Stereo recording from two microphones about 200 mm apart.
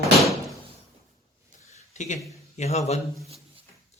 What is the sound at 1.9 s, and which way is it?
Speech, 35° left (ahead or behind).